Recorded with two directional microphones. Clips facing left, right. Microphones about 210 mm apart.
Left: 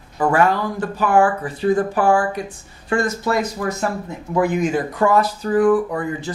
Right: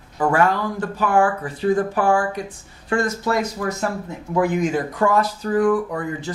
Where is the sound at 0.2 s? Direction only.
20° left (ahead or behind).